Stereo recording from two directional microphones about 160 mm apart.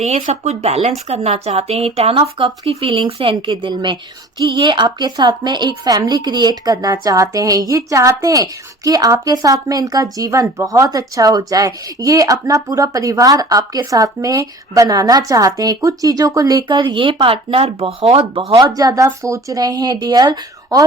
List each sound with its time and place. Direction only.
0.3 s speech: 40° right (ahead or behind); by 20.8 s 25° right (ahead or behind)